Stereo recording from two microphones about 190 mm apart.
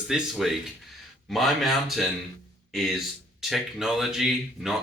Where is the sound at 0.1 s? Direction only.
Centre (ahead or behind).